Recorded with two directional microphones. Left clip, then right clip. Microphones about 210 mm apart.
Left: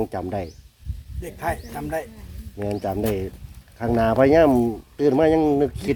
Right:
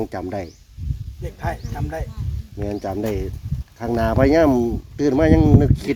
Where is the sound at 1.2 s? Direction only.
40° left (ahead or behind).